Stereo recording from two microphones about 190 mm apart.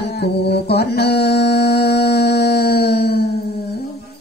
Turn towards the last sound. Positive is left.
turn(degrees=55)  # may be behind; listen again after turning